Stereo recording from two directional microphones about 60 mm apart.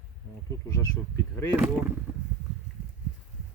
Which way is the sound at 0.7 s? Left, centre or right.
Left.